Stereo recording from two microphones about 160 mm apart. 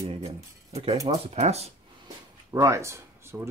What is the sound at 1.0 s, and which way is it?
Speech, 40° right (ahead or behind).